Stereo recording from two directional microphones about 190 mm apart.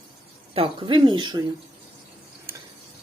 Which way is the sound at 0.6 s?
25° right (ahead or behind).